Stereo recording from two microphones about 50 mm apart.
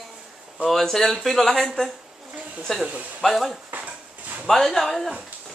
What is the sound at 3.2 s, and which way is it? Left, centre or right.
Speech, centre.